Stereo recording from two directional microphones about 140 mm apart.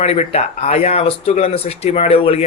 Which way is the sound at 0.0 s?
50° left (ahead or behind).